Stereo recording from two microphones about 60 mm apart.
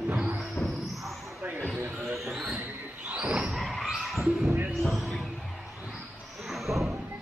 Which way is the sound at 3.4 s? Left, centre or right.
Centre.